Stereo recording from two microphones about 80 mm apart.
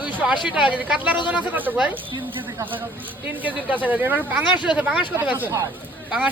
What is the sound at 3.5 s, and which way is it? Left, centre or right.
Speech, right.